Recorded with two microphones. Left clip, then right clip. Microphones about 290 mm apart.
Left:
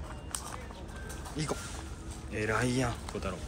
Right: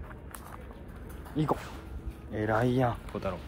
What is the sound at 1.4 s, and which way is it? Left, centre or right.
Speech, centre.